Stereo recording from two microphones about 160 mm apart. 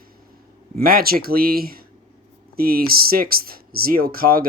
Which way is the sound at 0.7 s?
65° right (ahead or behind).